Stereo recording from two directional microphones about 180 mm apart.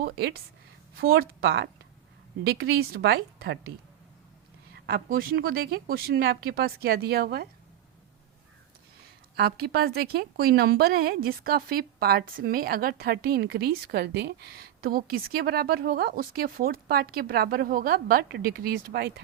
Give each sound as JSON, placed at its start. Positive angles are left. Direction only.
{"t": 0.0, "sound": "a woman's voice", "side_deg": -65}
{"t": 4.9, "sound": "a woman's voice", "side_deg": -50}
{"t": 9.3, "sound": "a woman's voice", "side_deg": -60}